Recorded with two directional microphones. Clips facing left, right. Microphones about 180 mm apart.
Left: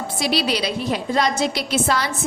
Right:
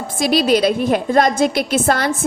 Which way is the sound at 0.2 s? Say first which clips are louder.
Right 8 dB; 50° right (ahead or behind).